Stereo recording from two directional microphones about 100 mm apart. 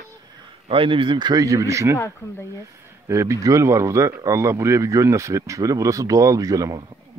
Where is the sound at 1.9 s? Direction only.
25° left (ahead or behind).